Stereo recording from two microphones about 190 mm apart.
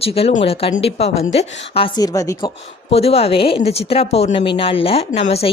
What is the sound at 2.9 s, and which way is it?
A woman's voice, 30° left (ahead or behind).